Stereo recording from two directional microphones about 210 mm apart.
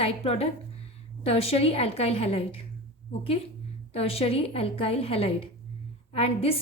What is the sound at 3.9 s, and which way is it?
A woman's voice, 30° left (ahead or behind).